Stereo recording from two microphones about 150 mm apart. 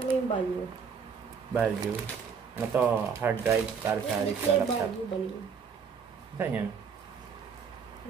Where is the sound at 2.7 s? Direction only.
15° right (ahead or behind).